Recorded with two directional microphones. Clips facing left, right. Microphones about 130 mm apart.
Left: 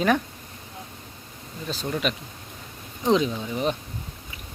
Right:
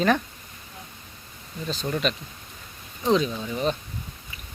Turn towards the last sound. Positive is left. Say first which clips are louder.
# even
turn(degrees=15)  # may be behind; listen again after turning